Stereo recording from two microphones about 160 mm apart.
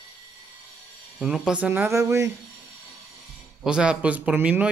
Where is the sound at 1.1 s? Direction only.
Centre (ahead or behind); by 2.2 s 20° right (ahead or behind).